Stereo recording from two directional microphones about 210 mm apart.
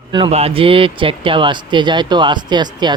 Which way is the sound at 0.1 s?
25° right (ahead or behind).